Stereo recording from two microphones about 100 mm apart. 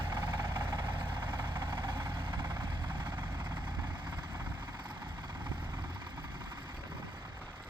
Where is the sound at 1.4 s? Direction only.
45° right (ahead or behind).